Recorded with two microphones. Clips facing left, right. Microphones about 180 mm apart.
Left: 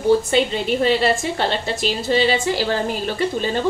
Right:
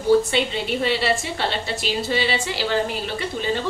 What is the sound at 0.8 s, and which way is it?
A woman's voice, 45° left (ahead or behind).